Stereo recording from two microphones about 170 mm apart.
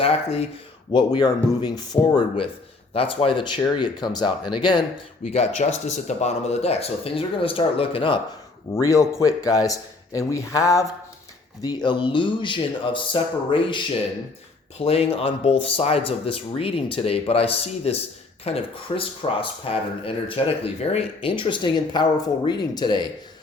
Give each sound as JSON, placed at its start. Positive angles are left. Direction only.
{"t": 0.0, "sound": "a man's voice", "side_deg": 35}
{"t": 5.3, "sound": "speech", "side_deg": 40}
{"t": 8.7, "sound": "a man's voice", "side_deg": 20}
{"t": 14.8, "sound": "a man's voice", "side_deg": 35}